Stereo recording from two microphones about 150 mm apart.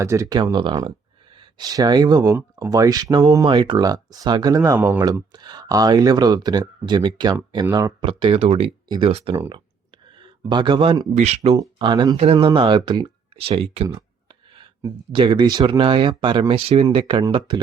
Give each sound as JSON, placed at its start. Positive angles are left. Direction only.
{"t": 0.0, "sound": "speech", "side_deg": -20}
{"t": 10.4, "sound": "speech", "side_deg": -30}
{"t": 11.1, "sound": "speech", "side_deg": -45}
{"t": 11.8, "sound": "speech", "side_deg": -30}
{"t": 12.1, "sound": "speech", "side_deg": -40}
{"t": 12.5, "sound": "speech", "side_deg": -30}
{"t": 13.9, "sound": "a sound", "side_deg": -35}
{"t": 15.1, "sound": "speech", "side_deg": -35}